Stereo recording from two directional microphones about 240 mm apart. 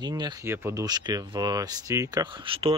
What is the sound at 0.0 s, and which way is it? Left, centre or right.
Speech, centre.